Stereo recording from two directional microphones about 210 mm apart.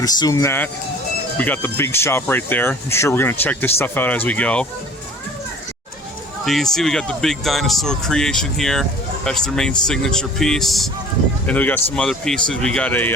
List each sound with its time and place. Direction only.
0.0 s speech: 15° left (ahead or behind)
6.4 s speech: centre (ahead or behind)